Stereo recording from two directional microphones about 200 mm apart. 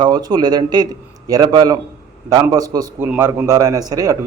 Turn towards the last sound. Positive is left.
turn(degrees=-20)  # may be behind; listen again after turning